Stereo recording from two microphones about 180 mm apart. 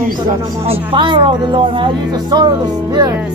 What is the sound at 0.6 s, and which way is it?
A woman's voice, 30° right (ahead or behind).